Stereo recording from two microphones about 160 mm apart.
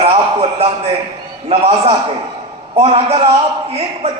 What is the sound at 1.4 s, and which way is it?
A man's voice, 35° right (ahead or behind).